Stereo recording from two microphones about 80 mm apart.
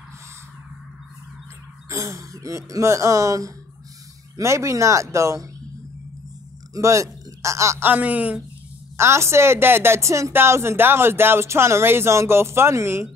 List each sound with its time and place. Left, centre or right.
1.9 s speech: right
6.7 s a sound: right
7.8 s a woman's voice: centre
8.9 s speech: right